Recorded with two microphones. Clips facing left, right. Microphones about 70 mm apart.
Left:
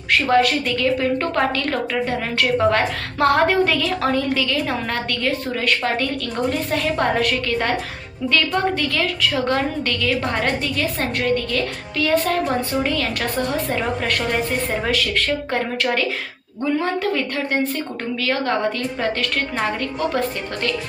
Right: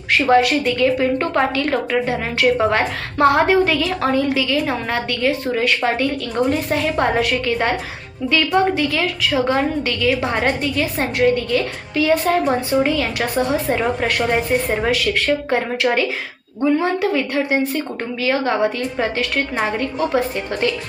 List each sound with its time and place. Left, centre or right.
0.1 s a woman's voice: centre